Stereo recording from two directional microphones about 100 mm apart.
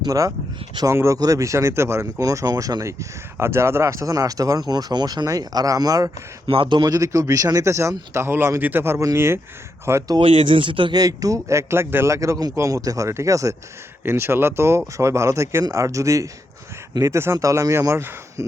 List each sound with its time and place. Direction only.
0.0 s speech: 35° right (ahead or behind)
6.5 s speech: 55° right (ahead or behind)
6.8 s speech: 35° right (ahead or behind)
10.2 s speech: 65° right (ahead or behind)
10.9 s speech: 40° right (ahead or behind)
14.0 s speech: 25° right (ahead or behind)